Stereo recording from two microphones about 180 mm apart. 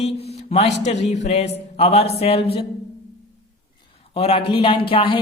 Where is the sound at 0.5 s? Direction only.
35° left (ahead or behind).